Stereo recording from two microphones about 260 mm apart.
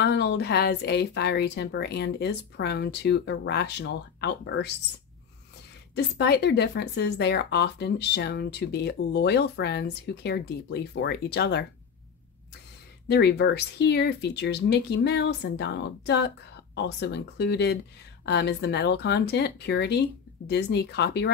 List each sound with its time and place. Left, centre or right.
0.0 s speech: left
5.9 s speech: left
13.1 s speech: left